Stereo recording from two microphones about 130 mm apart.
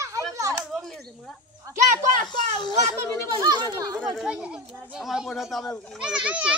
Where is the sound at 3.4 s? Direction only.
30° right (ahead or behind).